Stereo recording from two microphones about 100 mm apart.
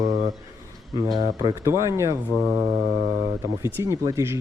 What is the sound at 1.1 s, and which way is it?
Speech, 35° right (ahead or behind).